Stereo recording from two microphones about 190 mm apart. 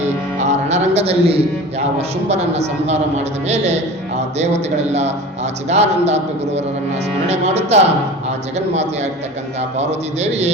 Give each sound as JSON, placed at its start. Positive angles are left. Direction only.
{"t": 0.3, "sound": "music", "side_deg": -35}
{"t": 3.4, "sound": "a man's voice", "side_deg": -35}